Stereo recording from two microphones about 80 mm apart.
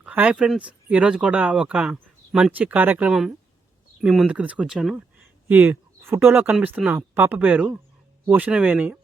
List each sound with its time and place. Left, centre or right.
0.0 s speech: centre
2.6 s speech: right
3.1 s speech: centre
4.3 s speech: centre
4.6 s speech: centre
5.5 s speech: right
7.3 s speech: centre